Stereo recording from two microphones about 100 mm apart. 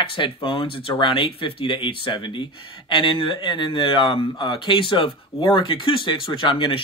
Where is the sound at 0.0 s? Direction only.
60° left (ahead or behind).